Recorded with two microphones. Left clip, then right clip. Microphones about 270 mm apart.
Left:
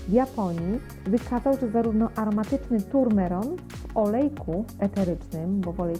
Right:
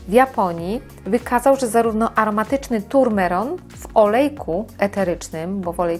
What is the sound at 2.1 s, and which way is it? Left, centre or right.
Speech, centre.